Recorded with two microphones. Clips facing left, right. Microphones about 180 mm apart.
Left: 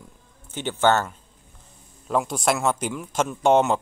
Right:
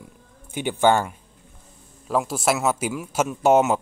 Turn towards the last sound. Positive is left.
turn(degrees=-5)  # may be behind; listen again after turning